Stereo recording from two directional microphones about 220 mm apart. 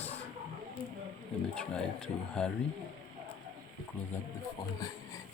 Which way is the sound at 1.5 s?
5° left (ahead or behind).